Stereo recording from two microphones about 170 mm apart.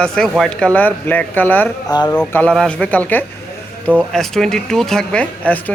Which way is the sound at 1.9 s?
25° left (ahead or behind).